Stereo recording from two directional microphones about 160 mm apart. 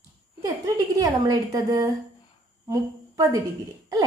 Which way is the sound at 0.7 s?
20° right (ahead or behind).